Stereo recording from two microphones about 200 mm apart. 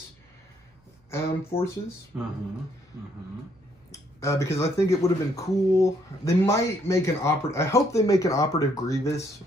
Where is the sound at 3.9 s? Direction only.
15° left (ahead or behind).